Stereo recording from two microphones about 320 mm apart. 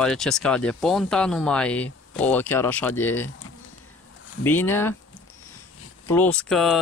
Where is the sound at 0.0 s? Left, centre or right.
Centre.